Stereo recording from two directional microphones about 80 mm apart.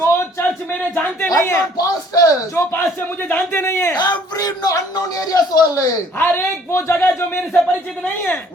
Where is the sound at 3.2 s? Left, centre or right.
Left.